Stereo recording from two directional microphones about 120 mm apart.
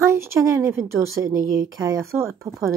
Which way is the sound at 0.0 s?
20° right (ahead or behind).